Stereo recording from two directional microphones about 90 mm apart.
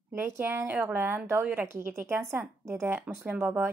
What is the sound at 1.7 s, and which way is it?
Speech, 30° right (ahead or behind).